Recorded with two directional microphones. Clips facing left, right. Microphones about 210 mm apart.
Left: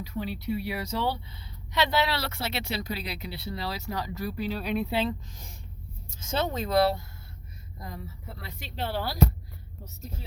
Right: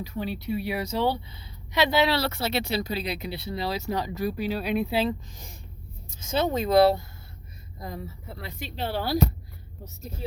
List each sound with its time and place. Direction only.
0.0 s speech: 25° right (ahead or behind)
2.0 s speech: 30° right (ahead or behind)